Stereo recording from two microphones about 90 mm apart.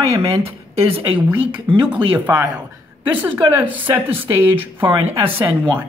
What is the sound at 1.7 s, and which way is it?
Speech, 70° right (ahead or behind).